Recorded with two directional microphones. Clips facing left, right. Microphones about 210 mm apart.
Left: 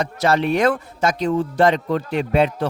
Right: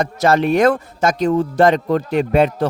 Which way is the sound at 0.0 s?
45° right (ahead or behind).